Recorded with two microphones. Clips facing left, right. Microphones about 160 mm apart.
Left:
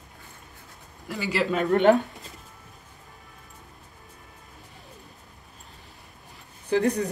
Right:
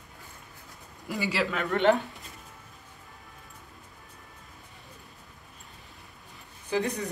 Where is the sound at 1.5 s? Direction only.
40° left (ahead or behind).